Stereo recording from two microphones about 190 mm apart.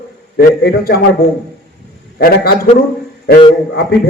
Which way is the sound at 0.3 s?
55° left (ahead or behind).